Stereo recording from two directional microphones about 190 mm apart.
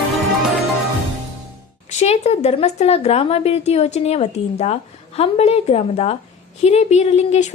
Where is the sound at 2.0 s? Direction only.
35° left (ahead or behind).